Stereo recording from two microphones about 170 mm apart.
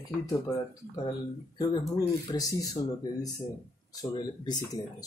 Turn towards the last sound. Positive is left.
turn(degrees=25)  # may be behind; listen again after turning